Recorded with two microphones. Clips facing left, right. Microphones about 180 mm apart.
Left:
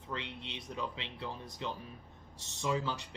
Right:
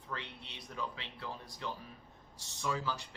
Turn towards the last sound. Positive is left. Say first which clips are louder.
# left 3 dB
turn(degrees=20)  # may be behind; listen again after turning